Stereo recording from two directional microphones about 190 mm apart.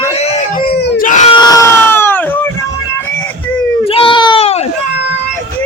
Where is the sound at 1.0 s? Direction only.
40° left (ahead or behind).